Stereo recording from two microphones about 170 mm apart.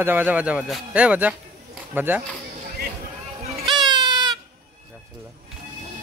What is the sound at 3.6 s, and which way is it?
Baby cry, centre (ahead or behind).